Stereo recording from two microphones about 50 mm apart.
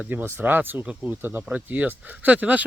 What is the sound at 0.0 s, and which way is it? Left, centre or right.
Speech, right.